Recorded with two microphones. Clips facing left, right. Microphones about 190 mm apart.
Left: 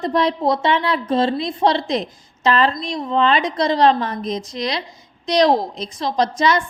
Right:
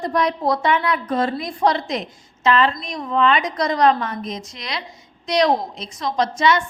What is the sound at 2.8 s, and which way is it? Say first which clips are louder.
A woman's voice: left 1 dB; 25° left (ahead or behind).